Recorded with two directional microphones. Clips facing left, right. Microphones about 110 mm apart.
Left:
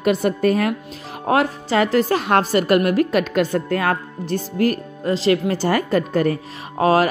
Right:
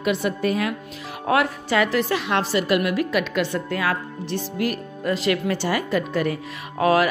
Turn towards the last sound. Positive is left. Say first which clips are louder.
# left 2 dB
turn(degrees=35)  # may be behind; listen again after turning